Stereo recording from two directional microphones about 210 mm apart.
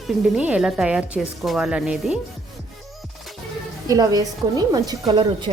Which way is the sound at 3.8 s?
15° right (ahead or behind).